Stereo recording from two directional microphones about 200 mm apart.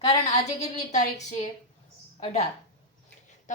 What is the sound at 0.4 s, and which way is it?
A woman's voice, 35° left (ahead or behind).